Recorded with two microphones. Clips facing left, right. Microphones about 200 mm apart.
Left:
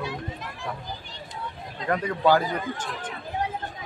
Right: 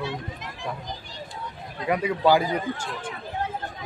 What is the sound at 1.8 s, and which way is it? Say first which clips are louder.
Speech: right 1 dB; 10° right (ahead or behind).